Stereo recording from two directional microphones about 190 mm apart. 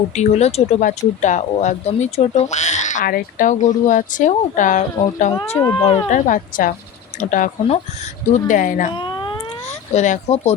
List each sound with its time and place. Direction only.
0.2 s speech: 35° left (ahead or behind)
5.5 s speech: 15° left (ahead or behind)
5.8 s speech: 30° left (ahead or behind)
6.2 s a woman's voice: 45° left (ahead or behind)
8.9 s a sound: 25° left (ahead or behind)
9.9 s speech: 35° left (ahead or behind)